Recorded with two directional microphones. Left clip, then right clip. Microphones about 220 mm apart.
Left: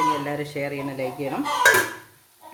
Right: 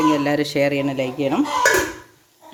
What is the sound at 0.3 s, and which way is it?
Speech, 45° right (ahead or behind).